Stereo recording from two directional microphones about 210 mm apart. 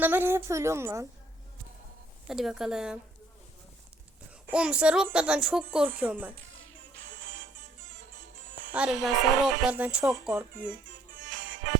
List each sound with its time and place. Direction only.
0.0 s a woman's voice: 10° right (ahead or behind)
2.2 s speech: centre (ahead or behind)
4.5 s a woman's voice: 5° right (ahead or behind)
6.6 s music: 60° right (ahead or behind)
8.7 s speech: 5° right (ahead or behind)
11.3 s music: 60° right (ahead or behind)